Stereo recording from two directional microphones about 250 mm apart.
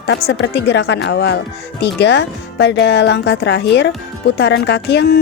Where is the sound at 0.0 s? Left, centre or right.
Left.